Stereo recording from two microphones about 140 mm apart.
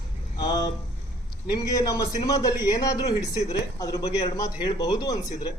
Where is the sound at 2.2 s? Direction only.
25° left (ahead or behind).